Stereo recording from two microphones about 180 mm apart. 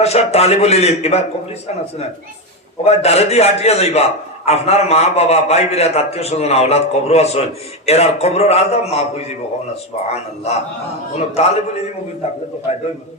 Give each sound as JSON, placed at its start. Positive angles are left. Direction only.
{"t": 0.0, "sound": "a man's voice", "side_deg": 35}
{"t": 2.8, "sound": "a man's voice", "side_deg": 35}